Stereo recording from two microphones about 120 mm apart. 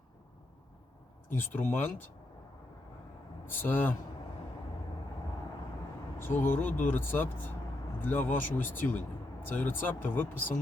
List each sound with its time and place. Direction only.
1.3 s speech: 15° left (ahead or behind)
3.4 s speech: 15° left (ahead or behind)
6.1 s speech: 20° left (ahead or behind)